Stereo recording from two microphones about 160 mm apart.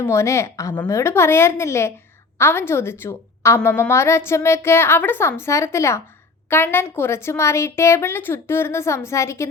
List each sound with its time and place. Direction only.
0.0 s a woman's voice: 15° left (ahead or behind)